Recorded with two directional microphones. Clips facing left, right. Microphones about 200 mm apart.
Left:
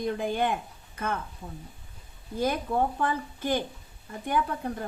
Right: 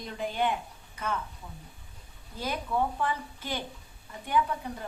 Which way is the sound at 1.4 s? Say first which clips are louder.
Left 5 dB; 35° left (ahead or behind).